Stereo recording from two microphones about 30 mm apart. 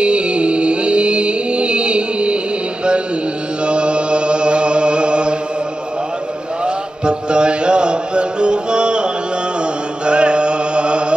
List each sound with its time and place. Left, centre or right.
0.0 s music: right
3.6 s chant: right
6.6 s mantra: right
10.0 s chant: right